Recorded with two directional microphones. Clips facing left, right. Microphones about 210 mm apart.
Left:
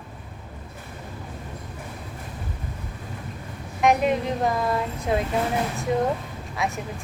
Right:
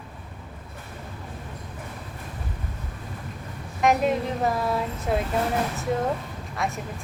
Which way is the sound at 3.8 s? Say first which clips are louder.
Left 1 dB; centre (ahead or behind).